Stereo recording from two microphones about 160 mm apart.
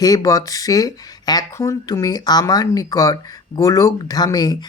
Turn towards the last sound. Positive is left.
turn(degrees=25)  # may be behind; listen again after turning